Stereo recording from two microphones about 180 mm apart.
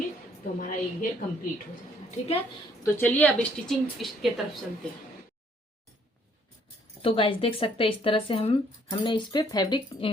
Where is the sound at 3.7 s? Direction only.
Centre (ahead or behind).